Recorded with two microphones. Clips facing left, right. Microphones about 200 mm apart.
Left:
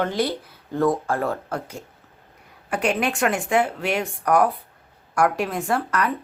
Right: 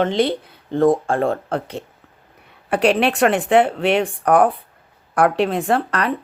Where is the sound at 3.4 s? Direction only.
65° right (ahead or behind).